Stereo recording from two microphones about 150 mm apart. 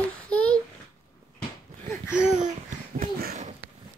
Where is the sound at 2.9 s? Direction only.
75° right (ahead or behind).